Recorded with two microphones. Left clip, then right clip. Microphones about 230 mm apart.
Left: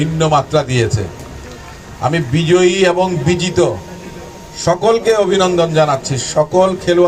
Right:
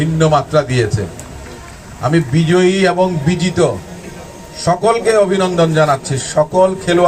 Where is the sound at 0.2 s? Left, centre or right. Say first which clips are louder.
Right 1 dB; left.